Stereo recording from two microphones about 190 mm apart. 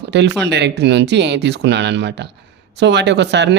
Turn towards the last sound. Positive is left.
turn(degrees=-65)  # may be behind; listen again after turning